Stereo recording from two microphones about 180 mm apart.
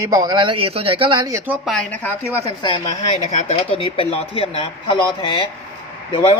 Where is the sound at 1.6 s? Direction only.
5° left (ahead or behind).